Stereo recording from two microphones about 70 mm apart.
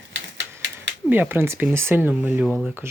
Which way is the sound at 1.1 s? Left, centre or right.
Right.